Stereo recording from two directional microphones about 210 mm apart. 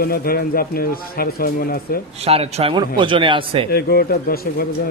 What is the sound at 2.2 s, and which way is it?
A man's voice, 30° right (ahead or behind).